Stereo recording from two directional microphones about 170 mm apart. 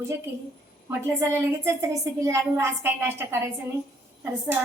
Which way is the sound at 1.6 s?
20° right (ahead or behind).